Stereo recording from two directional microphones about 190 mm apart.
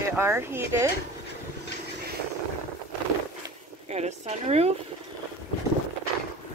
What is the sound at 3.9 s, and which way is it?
Speech, 35° right (ahead or behind).